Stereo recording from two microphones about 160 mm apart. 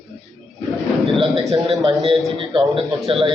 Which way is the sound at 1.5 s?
40° right (ahead or behind).